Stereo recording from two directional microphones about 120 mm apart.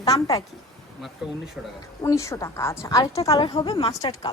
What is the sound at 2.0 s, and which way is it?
A woman's voice, 25° left (ahead or behind).